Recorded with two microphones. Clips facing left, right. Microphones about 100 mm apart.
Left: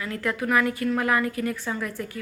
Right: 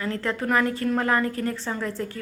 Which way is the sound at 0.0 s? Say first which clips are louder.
Right 1 dB; 35° right (ahead or behind).